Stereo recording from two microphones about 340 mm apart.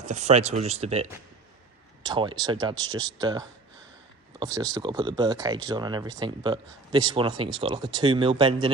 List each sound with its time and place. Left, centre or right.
0.0 s speech: right